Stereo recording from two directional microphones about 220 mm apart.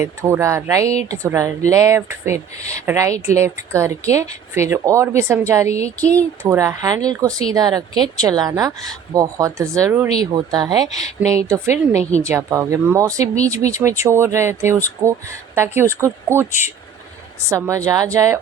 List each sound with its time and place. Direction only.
0.0 s a woman's voice: 10° right (ahead or behind)
5.6 s a sound: 30° left (ahead or behind)
6.0 s speech: 5° left (ahead or behind)
6.4 s a woman's voice: 15° right (ahead or behind)
11.2 s a sound: 30° left (ahead or behind)
11.4 s a woman's voice: 15° right (ahead or behind)
17.5 s a woman's voice: 15° right (ahead or behind)